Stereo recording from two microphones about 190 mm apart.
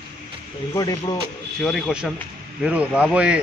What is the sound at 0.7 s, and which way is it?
Speech, 20° left (ahead or behind).